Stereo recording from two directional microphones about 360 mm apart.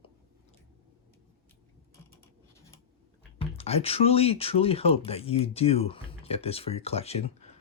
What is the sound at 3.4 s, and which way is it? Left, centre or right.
Speech, centre.